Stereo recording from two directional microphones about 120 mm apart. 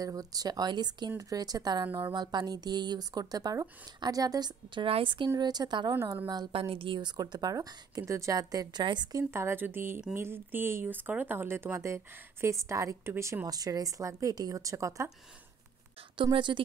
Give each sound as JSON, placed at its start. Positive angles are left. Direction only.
{"t": 0.0, "sound": "speech", "side_deg": -30}
{"t": 4.8, "sound": "a woman's voice", "side_deg": -50}
{"t": 6.5, "sound": "speech", "side_deg": -50}
{"t": 9.3, "sound": "speech", "side_deg": -20}
{"t": 16.2, "sound": "speech", "side_deg": -40}